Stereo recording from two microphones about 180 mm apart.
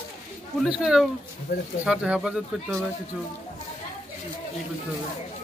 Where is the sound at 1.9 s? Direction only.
5° right (ahead or behind).